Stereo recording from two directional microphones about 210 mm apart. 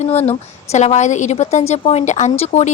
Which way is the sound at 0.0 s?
30° left (ahead or behind).